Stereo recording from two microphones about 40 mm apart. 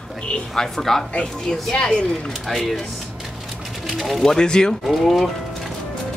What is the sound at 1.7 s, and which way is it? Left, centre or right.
Speech, left.